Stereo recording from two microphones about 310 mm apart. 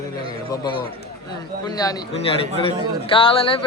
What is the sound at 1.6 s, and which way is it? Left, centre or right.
A man's voice, centre.